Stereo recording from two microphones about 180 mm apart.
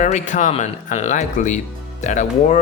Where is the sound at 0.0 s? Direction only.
40° left (ahead or behind).